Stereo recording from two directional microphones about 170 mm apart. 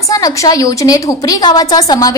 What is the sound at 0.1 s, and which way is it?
A woman's voice, 20° left (ahead or behind).